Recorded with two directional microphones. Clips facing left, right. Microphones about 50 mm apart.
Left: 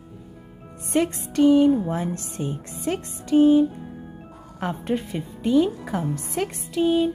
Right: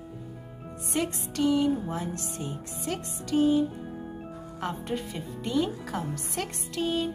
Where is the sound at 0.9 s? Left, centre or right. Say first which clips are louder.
Left 8 dB; left.